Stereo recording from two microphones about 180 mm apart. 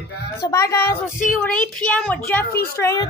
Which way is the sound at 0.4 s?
15° left (ahead or behind).